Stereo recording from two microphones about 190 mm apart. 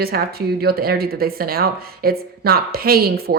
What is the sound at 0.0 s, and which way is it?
Speech, 55° right (ahead or behind).